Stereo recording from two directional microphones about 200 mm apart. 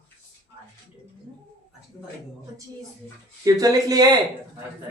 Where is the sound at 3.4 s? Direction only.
15° right (ahead or behind).